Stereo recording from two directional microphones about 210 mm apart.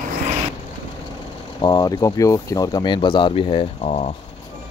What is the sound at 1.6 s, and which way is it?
Speech, 20° left (ahead or behind).